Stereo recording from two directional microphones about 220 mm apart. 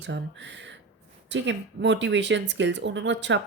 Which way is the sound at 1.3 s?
55° right (ahead or behind).